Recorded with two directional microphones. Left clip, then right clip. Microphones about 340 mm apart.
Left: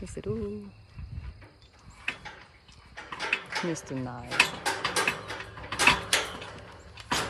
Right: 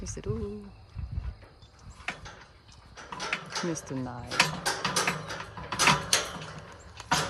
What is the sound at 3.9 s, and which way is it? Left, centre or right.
Speech, centre.